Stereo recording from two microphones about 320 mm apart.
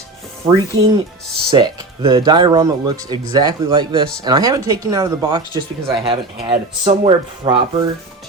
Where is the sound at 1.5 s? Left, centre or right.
Centre.